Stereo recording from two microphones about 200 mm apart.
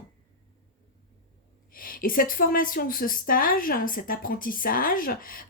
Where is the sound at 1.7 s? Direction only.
45° left (ahead or behind).